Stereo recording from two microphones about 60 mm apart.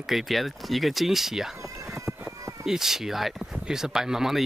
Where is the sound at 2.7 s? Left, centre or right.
Centre.